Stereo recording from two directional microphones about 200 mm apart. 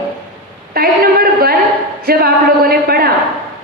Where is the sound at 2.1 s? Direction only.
50° right (ahead or behind).